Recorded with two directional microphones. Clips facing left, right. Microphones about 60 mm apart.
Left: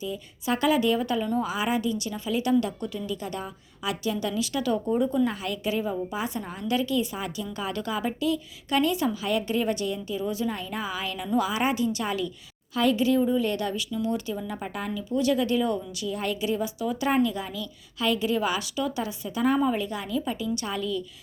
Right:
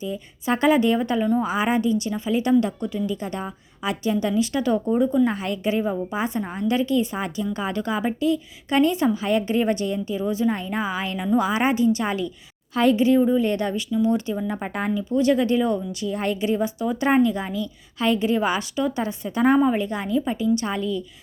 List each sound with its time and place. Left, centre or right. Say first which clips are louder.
0.0 s a woman's voice: right 3 dB; right
19.5 s speech: right 5 dB; right